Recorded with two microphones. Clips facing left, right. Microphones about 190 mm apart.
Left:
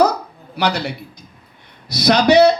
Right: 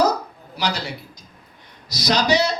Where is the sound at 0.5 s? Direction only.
60° left (ahead or behind).